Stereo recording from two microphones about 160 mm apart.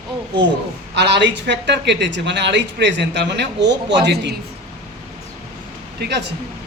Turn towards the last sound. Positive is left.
turn(degrees=-90)